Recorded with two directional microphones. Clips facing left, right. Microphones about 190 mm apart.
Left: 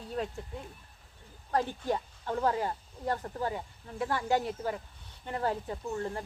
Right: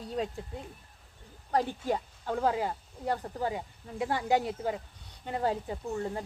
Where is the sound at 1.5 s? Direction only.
15° right (ahead or behind).